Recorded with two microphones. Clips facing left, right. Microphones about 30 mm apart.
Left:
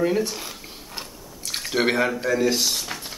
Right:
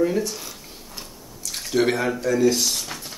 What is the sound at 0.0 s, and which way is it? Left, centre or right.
Chewing, left.